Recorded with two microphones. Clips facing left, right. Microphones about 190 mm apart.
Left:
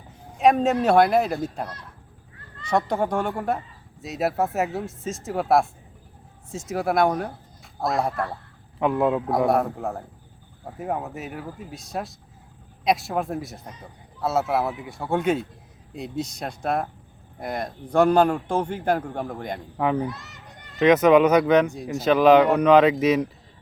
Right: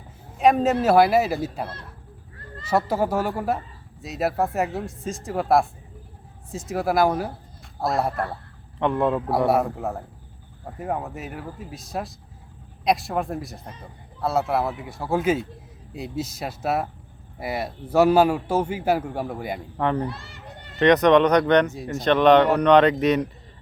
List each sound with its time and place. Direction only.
0.3 s a man's voice: centre (ahead or behind)
19.7 s speech: 5° left (ahead or behind)
20.1 s children playing: 30° right (ahead or behind)
20.7 s speech: 5° left (ahead or behind)